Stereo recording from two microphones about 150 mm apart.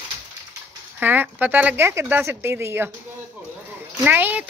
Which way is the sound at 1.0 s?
10° right (ahead or behind).